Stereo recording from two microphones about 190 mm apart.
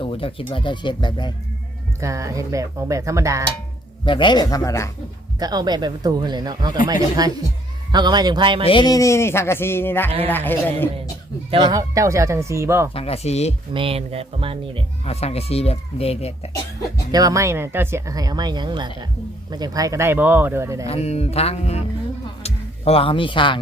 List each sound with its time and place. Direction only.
0.0 s speech: 30° left (ahead or behind)
2.0 s speech: 15° right (ahead or behind)
4.0 s speech: 25° left (ahead or behind)
5.4 s speech: 20° right (ahead or behind)
8.6 s a man's voice: 25° left (ahead or behind)
11.5 s speech: 20° right (ahead or behind)
12.9 s speech: 30° left (ahead or behind)
13.7 s speech: 30° right (ahead or behind)
15.0 s speech: 35° left (ahead or behind)
17.1 s speech: 20° right (ahead or behind)
20.8 s speech: 35° left (ahead or behind)